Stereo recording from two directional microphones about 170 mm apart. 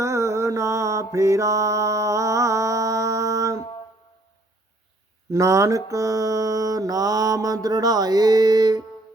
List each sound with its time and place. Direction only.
0.0 s mantra: 15° right (ahead or behind)
5.3 s mantra: 20° right (ahead or behind)